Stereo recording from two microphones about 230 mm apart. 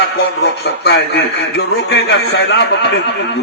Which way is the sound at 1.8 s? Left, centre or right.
Left.